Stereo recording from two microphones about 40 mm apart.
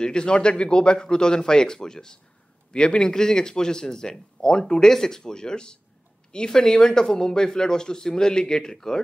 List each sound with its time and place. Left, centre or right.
0.0 s speech: left